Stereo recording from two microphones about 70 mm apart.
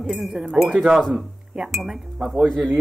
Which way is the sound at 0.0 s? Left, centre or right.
Centre.